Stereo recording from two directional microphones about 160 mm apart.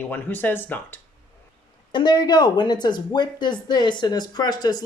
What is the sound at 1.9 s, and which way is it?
Speech, 25° left (ahead or behind).